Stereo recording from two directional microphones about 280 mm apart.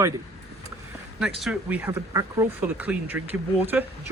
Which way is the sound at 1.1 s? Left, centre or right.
Centre.